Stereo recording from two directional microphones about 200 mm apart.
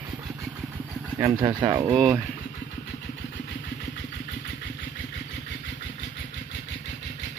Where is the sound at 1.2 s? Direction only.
20° right (ahead or behind).